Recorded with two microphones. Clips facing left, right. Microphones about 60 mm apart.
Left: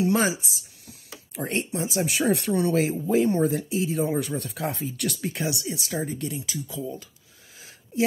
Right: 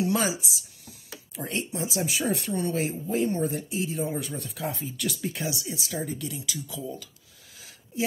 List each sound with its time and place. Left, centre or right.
0.0 s speech: left
2.0 s speech: left
4.4 s speech: left
5.9 s speech: left